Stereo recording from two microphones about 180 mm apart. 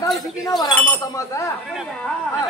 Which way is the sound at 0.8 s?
15° left (ahead or behind).